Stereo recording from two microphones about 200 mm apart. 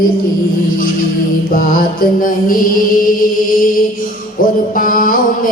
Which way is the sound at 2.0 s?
45° left (ahead or behind).